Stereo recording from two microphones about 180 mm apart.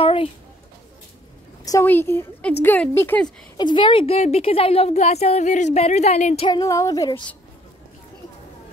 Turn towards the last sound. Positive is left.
turn(degrees=20)  # may be behind; listen again after turning